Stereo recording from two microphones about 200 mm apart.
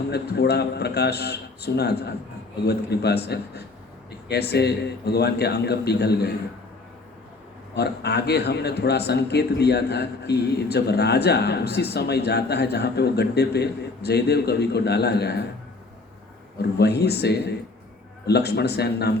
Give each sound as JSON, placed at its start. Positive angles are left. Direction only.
{"t": 0.1, "sound": "a man's voice", "side_deg": 55}
{"t": 7.8, "sound": "a man's voice", "side_deg": 55}
{"t": 16.6, "sound": "a man's voice", "side_deg": 55}